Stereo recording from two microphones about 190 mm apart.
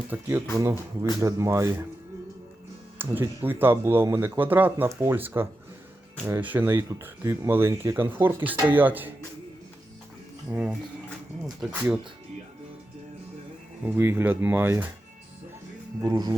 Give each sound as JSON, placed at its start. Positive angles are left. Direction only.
{"t": 0.1, "sound": "speech", "side_deg": -10}
{"t": 3.0, "sound": "speech", "side_deg": -10}
{"t": 10.5, "sound": "speech", "side_deg": -5}
{"t": 13.8, "sound": "speech", "side_deg": -10}
{"t": 16.0, "sound": "speech", "side_deg": -20}